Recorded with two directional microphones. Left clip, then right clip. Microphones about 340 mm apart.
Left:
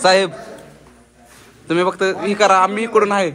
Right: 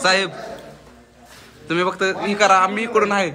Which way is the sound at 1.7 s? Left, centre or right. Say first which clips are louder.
Left 3 dB; centre.